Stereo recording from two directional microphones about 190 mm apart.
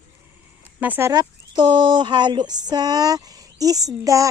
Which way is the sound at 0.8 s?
10° right (ahead or behind).